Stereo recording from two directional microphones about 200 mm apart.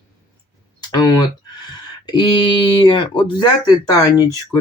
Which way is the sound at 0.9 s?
20° left (ahead or behind).